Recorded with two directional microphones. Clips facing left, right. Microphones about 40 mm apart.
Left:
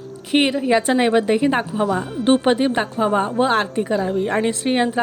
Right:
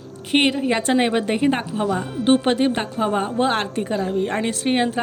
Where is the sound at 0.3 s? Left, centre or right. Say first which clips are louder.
Left 2 dB; centre.